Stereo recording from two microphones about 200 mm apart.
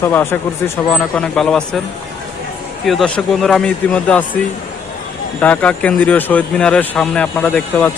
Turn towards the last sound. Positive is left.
turn(degrees=5)  # may be behind; listen again after turning